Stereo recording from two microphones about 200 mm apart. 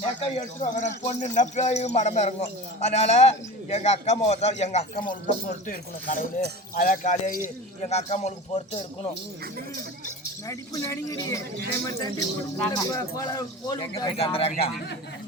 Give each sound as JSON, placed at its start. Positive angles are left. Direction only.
{"t": 0.0, "sound": "speech", "side_deg": 30}
{"t": 10.4, "sound": "speech", "side_deg": 15}
{"t": 12.7, "sound": "speech", "side_deg": 15}